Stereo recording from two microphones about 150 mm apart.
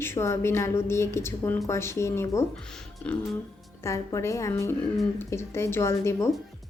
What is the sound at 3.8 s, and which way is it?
A woman's voice, 20° left (ahead or behind).